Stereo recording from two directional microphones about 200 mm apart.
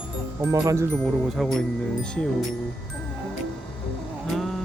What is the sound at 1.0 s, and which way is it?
Speech, centre (ahead or behind).